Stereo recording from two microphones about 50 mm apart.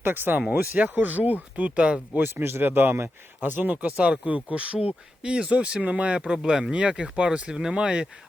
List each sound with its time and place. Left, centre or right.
0.0 s speech: right
2.3 s speech: right; by 8.0 s centre